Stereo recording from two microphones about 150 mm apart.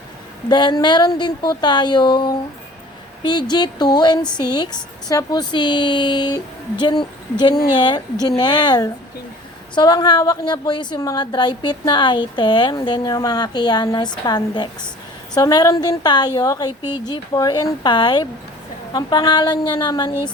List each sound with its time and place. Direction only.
0.4 s a woman's voice: 30° left (ahead or behind)
3.5 s a woman's voice: 30° left (ahead or behind)